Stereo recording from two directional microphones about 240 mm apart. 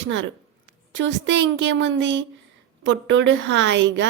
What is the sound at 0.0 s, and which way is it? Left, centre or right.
A woman's voice, right.